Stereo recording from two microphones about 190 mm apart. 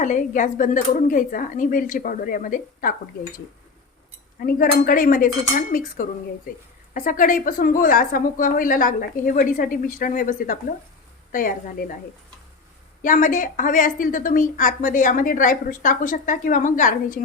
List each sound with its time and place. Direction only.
0.0 s a woman's voice: 40° left (ahead or behind)
4.4 s a woman's voice: 50° left (ahead or behind)
13.0 s a woman's voice: 45° left (ahead or behind)